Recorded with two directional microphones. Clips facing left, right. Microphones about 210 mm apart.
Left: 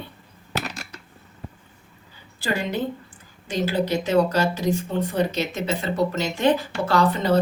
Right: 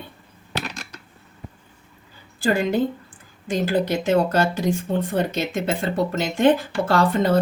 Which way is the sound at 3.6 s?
55° right (ahead or behind).